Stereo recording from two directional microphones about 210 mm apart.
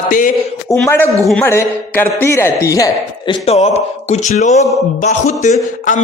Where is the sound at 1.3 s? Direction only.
10° left (ahead or behind).